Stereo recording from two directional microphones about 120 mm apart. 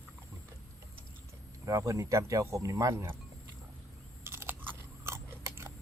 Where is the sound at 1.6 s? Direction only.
25° right (ahead or behind).